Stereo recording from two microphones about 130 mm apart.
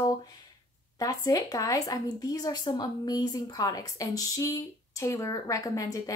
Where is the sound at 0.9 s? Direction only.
30° left (ahead or behind).